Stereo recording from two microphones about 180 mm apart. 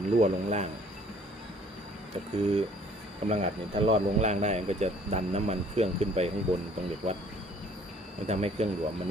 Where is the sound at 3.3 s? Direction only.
35° right (ahead or behind).